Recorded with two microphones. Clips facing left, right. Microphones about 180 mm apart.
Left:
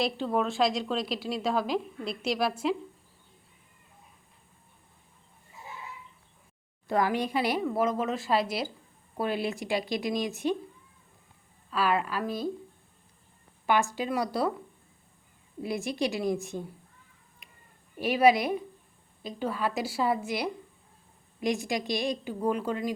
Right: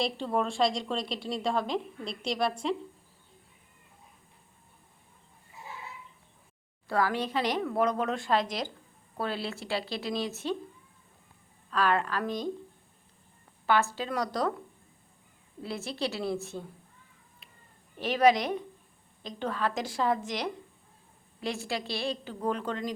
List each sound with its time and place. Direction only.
0.0 s a woman's voice: centre (ahead or behind)
6.8 s speech: 20° left (ahead or behind)
11.7 s speech: 5° left (ahead or behind)
13.7 s speech: 15° left (ahead or behind)
15.6 s speech: 15° left (ahead or behind)
17.4 s a sound: 15° left (ahead or behind)
17.9 s speech: 10° left (ahead or behind)